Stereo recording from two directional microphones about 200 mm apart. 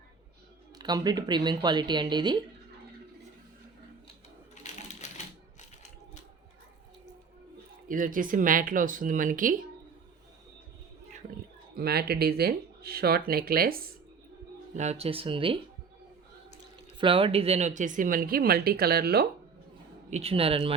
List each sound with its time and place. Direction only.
0.8 s speech: 20° right (ahead or behind)
4.6 s typewriter: 35° left (ahead or behind)
7.9 s a woman's voice: 40° right (ahead or behind)
11.8 s a woman's voice: 50° right (ahead or behind)
14.8 s speech: 30° right (ahead or behind)
17.0 s a woman's voice: 25° right (ahead or behind); by 19.3 s 50° right (ahead or behind)
20.1 s speech: 30° right (ahead or behind)